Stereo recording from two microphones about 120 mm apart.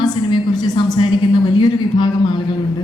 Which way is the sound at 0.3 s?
35° left (ahead or behind).